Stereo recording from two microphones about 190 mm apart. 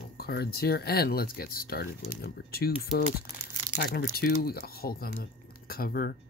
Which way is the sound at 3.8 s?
50° left (ahead or behind).